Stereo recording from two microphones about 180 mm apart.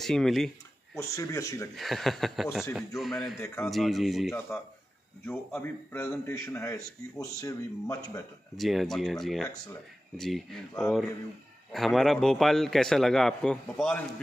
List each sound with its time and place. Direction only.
0.0 s a man's voice: centre (ahead or behind)
0.9 s a man's voice: 15° left (ahead or behind)
1.8 s a man's voice: centre (ahead or behind)
3.3 s a man's voice: 15° left (ahead or behind)
3.7 s a man's voice: centre (ahead or behind)
4.5 s a man's voice: 15° left (ahead or behind)
8.5 s a man's voice: centre (ahead or behind)